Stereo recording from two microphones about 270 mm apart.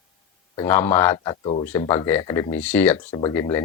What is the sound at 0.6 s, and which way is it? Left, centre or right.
Speech, centre.